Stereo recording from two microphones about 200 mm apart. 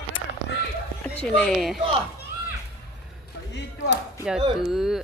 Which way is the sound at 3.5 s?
60° left (ahead or behind).